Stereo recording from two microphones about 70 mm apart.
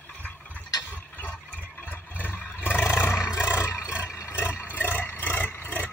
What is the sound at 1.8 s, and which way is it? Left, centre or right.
Vehicle, left.